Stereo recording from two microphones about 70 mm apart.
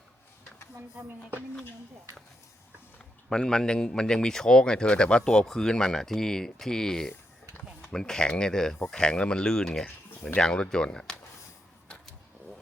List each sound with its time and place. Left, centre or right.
0.9 s speech: right
3.2 s speech: centre
7.1 s a sound: left
7.9 s speech: centre